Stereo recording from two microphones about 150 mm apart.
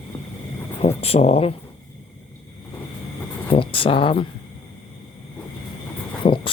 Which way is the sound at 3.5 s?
35° left (ahead or behind).